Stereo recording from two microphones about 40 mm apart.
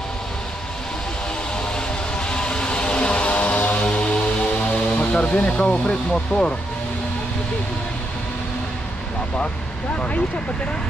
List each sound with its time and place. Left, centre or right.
2.2 s vehicle: left
5.7 s speech: left